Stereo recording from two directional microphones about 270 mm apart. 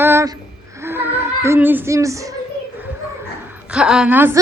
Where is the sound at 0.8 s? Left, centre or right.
Centre.